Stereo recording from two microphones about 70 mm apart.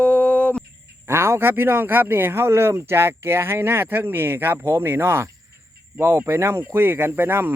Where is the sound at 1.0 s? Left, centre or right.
Right.